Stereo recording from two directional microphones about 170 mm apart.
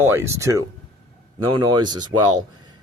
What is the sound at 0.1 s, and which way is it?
Speech, 15° right (ahead or behind).